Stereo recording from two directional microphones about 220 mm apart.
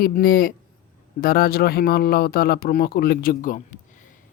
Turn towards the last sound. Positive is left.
turn(degrees=35)  # may be behind; listen again after turning